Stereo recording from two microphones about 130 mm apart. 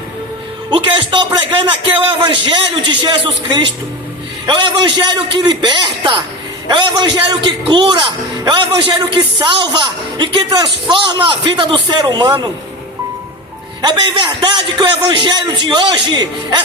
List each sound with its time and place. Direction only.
0.7 s a man's voice: 40° right (ahead or behind)
13.8 s a man's voice: 35° right (ahead or behind)